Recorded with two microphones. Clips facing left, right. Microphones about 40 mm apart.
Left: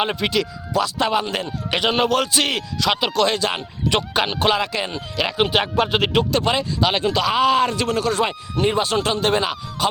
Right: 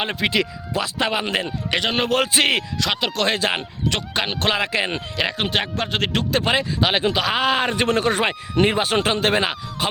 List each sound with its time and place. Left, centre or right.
0.0 s speech: centre
0.3 s speech: centre
1.2 s speech: right
1.7 s speech: centre
2.1 s speech: right
2.8 s speech: centre
3.2 s speech: centre
3.8 s speech: centre
4.5 s speech: centre
5.4 s speech: centre
6.3 s speech: centre; by 8.2 s right
8.7 s speech: right